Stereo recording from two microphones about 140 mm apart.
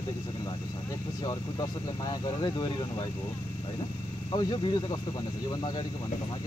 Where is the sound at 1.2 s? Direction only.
30° left (ahead or behind).